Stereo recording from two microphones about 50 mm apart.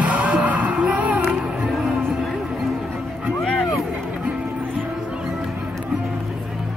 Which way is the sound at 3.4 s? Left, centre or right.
Centre.